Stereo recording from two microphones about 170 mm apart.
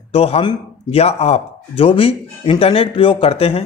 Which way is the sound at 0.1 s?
35° left (ahead or behind).